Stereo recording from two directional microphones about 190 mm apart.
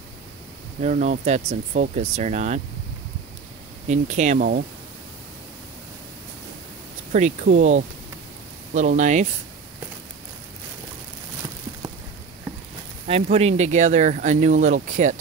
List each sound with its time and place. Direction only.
0.7 s speech: 40° right (ahead or behind)
3.8 s speech: 40° right (ahead or behind)
7.1 s speech: 40° right (ahead or behind)
13.0 s speech: 35° right (ahead or behind)